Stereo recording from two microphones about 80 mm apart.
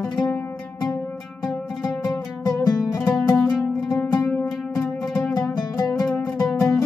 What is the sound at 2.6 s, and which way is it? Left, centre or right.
Music, left.